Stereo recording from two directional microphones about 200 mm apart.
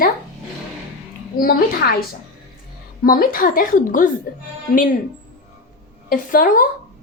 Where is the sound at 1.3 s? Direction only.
45° left (ahead or behind).